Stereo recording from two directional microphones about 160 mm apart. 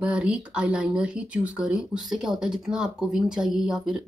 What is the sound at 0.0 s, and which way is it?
Speech, 5° right (ahead or behind).